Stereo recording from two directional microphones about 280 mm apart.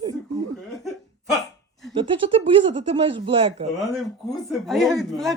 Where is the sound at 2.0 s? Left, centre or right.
Centre.